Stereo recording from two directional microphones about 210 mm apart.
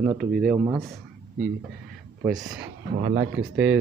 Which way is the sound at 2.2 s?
15° right (ahead or behind).